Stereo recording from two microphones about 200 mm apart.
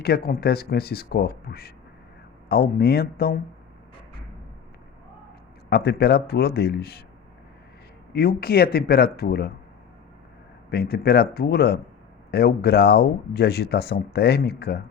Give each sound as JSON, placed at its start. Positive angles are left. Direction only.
{"t": 0.0, "sound": "speech", "side_deg": 50}
{"t": 5.6, "sound": "speech", "side_deg": 55}
{"t": 8.1, "sound": "speech", "side_deg": 50}
{"t": 10.7, "sound": "speech", "side_deg": 50}